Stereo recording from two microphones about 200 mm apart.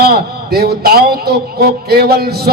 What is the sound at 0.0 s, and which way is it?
Speech, 50° right (ahead or behind).